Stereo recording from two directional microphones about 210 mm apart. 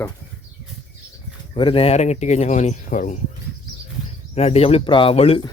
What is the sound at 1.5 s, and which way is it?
Speech, 25° left (ahead or behind).